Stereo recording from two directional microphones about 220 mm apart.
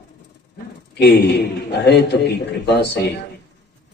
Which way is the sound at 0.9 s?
50° left (ahead or behind).